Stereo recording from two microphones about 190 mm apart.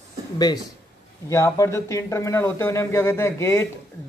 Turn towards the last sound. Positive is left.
turn(degrees=15)  # may be behind; listen again after turning